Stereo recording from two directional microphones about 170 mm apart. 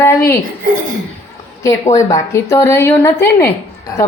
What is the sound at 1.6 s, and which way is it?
A woman's voice, 20° left (ahead or behind).